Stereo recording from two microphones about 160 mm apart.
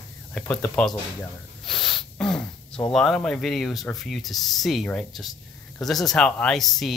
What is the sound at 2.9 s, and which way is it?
Speech, centre (ahead or behind).